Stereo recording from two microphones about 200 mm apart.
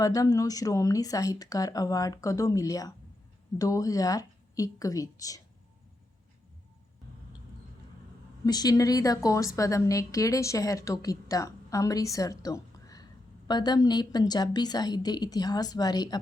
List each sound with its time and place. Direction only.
0.0 s a woman's voice: 15° left (ahead or behind)
8.4 s a woman's voice: 20° left (ahead or behind)